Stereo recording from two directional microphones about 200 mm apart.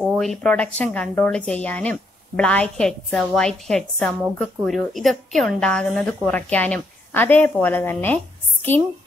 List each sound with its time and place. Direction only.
0.0 s a woman's voice: centre (ahead or behind)